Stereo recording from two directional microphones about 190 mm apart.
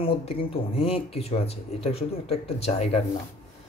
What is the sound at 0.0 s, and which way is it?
Speech, 30° left (ahead or behind).